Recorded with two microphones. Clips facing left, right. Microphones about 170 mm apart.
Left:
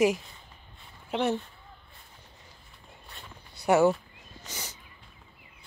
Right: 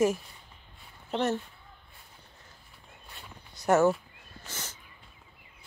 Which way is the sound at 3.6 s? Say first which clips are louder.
Left 1 dB; 10° left (ahead or behind).